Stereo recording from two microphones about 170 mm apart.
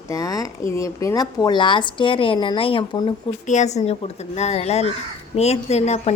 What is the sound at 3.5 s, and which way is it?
Speech, 45° left (ahead or behind).